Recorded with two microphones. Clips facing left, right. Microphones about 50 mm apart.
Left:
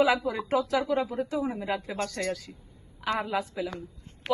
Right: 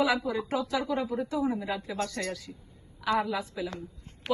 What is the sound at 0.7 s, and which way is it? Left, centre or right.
A woman's voice, left.